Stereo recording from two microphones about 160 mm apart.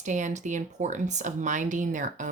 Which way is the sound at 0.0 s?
50° right (ahead or behind).